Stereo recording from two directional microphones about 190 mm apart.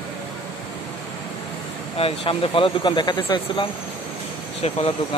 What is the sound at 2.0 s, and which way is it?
Speech, 30° left (ahead or behind).